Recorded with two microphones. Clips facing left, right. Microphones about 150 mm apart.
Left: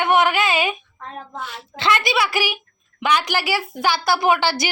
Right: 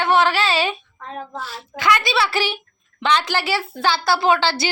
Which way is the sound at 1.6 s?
25° left (ahead or behind).